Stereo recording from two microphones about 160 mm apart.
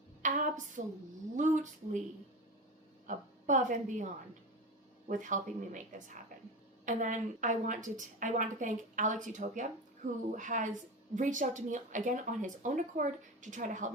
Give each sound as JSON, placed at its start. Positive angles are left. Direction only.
{"t": 0.2, "sound": "a sound", "side_deg": -50}
{"t": 1.4, "sound": "a woman's voice", "side_deg": -50}
{"t": 3.1, "sound": "a woman's voice", "side_deg": -50}
{"t": 6.8, "sound": "a woman's voice", "side_deg": -50}